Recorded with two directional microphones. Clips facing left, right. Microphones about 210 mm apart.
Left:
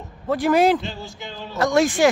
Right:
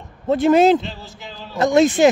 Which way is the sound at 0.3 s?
25° right (ahead or behind).